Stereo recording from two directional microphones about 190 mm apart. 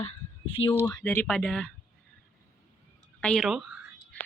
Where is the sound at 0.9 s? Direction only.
15° left (ahead or behind).